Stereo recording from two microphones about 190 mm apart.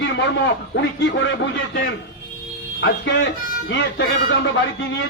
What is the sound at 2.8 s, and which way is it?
Speech, 85° left.